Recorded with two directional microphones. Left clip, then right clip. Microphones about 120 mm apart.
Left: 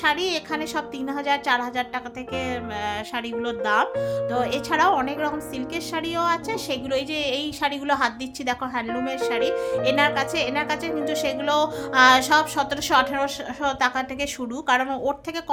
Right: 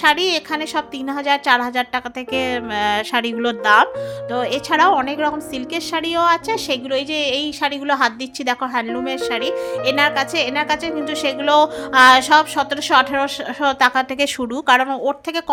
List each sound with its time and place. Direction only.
0.0 s speech: 40° right (ahead or behind)
1.3 s music: 45° right (ahead or behind); by 3.8 s 60° right (ahead or behind)
4.3 s speech: 30° right (ahead or behind)
6.9 s a woman's voice: 25° right (ahead or behind); by 14.0 s 45° right (ahead or behind)
14.7 s music: 45° right (ahead or behind)